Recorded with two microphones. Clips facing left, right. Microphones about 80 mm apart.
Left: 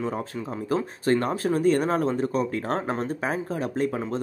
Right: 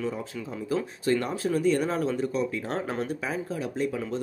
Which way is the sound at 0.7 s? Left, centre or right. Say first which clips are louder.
Left 2 dB; left.